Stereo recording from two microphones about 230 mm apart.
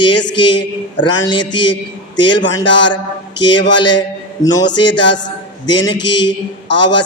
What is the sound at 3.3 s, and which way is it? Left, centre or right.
Speech, left.